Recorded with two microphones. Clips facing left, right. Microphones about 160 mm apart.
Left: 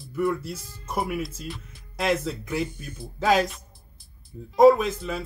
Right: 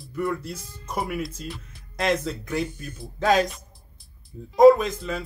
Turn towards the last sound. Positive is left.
turn(degrees=5)  # may be behind; listen again after turning